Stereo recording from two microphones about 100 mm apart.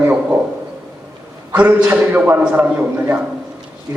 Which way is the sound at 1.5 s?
15° right (ahead or behind).